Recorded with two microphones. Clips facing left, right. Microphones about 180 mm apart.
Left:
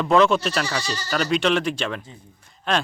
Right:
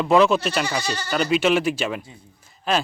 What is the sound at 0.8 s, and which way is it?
Speech, 55° right (ahead or behind).